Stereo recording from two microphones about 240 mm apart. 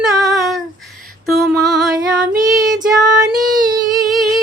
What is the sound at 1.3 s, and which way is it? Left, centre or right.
Music, centre.